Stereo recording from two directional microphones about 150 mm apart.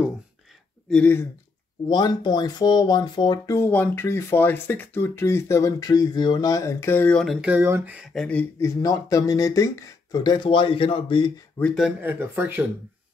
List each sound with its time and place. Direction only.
0.8 s speech: 5° left (ahead or behind)
1.9 s speech: 30° left (ahead or behind); by 7.3 s 5° left (ahead or behind)
7.4 s speech: 15° right (ahead or behind)
8.1 s speech: 5° left (ahead or behind); by 11.3 s 35° left (ahead or behind)
11.6 s speech: centre (ahead or behind)
12.0 s speech: 15° right (ahead or behind)